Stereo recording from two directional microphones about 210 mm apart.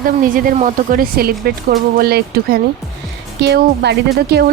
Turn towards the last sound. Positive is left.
turn(degrees=-50)  # may be behind; listen again after turning